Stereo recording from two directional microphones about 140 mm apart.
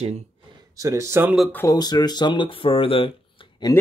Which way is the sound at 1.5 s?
25° left (ahead or behind).